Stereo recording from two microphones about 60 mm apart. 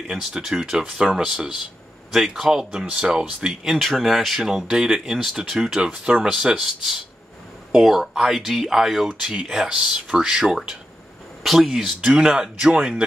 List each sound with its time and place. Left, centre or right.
0.1 s speech: centre
7.7 s speech: centre